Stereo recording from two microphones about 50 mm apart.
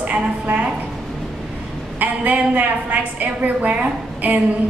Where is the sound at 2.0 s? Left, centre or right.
Right.